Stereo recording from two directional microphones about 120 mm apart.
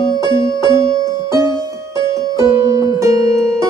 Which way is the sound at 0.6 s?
30° right (ahead or behind).